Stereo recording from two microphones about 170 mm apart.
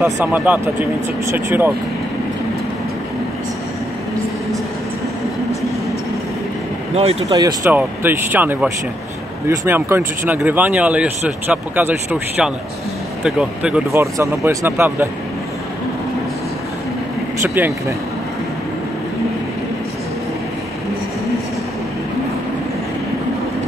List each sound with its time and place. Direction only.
0.0 s speech: 10° right (ahead or behind)
7.2 s speech: 20° right (ahead or behind)
9.7 s speech: 15° right (ahead or behind)
14.1 s speech: 15° right (ahead or behind)
17.6 s speech: 15° right (ahead or behind)